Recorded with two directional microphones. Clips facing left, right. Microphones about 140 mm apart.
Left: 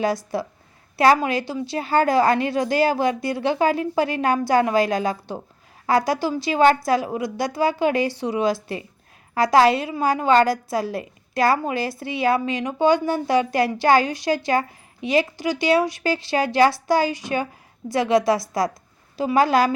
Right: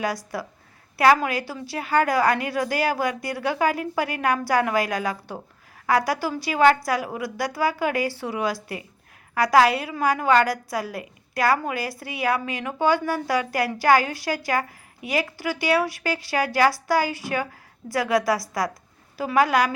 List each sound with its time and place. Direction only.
0.3 s a woman's voice: 25° left (ahead or behind)